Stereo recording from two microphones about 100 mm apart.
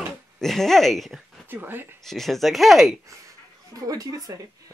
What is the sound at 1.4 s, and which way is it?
Speech, 20° right (ahead or behind).